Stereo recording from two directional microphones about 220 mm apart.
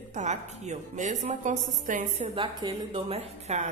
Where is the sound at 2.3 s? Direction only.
20° right (ahead or behind).